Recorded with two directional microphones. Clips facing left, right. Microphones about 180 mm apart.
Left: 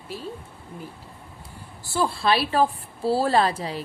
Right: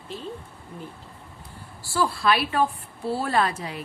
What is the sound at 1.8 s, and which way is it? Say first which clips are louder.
A woman's voice: even; 25° left (ahead or behind).